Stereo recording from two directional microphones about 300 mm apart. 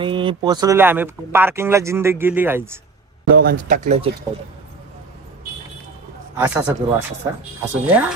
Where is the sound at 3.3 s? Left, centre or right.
Right.